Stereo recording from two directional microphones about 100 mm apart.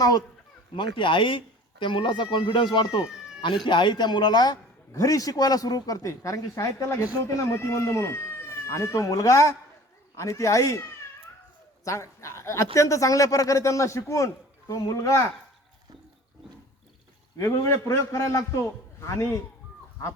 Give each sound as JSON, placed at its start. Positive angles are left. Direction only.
{"t": 0.8, "sound": "speech", "side_deg": 55}
{"t": 17.3, "sound": "a man's voice", "side_deg": 30}